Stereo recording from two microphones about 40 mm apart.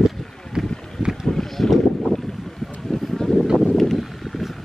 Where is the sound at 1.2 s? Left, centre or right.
Centre.